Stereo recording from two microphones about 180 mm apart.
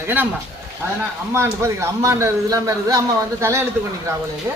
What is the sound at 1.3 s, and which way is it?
A man's voice, 15° right (ahead or behind).